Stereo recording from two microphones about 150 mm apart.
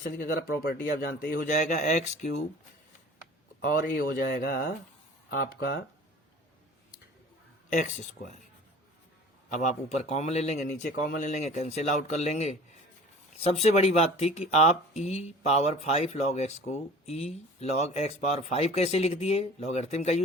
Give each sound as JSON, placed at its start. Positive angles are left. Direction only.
{"t": 0.0, "sound": "speech", "side_deg": 75}
{"t": 0.9, "sound": "speech", "side_deg": 75}
{"t": 3.6, "sound": "speech", "side_deg": 75}
{"t": 7.7, "sound": "speech", "side_deg": 55}
{"t": 9.5, "sound": "speech", "side_deg": 55}